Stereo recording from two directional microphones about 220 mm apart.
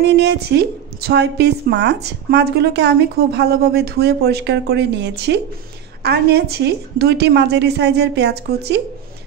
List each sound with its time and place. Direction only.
0.0 s a woman's voice: 50° right (ahead or behind)